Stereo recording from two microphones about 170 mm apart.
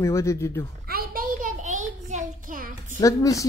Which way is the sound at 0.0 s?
15° left (ahead or behind).